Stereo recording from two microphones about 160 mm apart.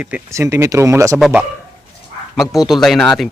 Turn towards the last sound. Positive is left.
turn(degrees=0)  # may be behind; listen again after turning